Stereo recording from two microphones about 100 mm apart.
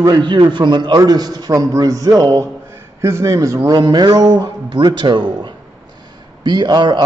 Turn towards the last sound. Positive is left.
turn(degrees=-50)  # may be behind; listen again after turning